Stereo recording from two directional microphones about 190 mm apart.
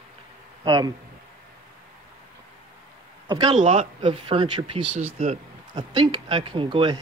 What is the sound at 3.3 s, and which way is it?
Speech, 25° right (ahead or behind).